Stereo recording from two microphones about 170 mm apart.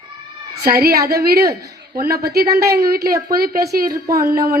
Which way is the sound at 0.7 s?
65° right (ahead or behind).